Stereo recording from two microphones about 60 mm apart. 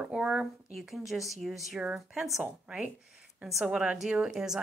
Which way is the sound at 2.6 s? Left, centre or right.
Centre.